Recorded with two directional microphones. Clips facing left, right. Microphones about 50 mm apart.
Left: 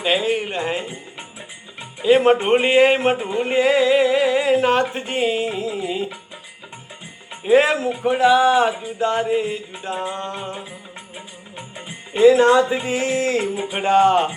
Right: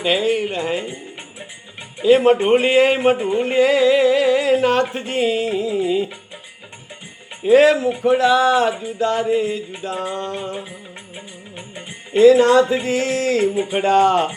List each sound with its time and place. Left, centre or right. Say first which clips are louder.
0.5 s speech: right 1 dB; left
2.1 s speech: right 1 dB; left
3.3 s music: right 1 dB; left
4.9 s speech: right 2 dB; left
7.4 s speech: right 3 dB; left
12.1 s speech: right 2 dB; centre